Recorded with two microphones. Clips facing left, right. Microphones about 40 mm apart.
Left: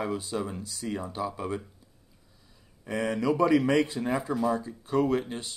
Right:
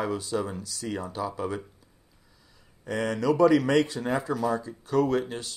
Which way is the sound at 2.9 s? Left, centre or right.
Right.